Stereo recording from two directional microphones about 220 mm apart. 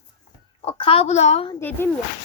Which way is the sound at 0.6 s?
25° left (ahead or behind).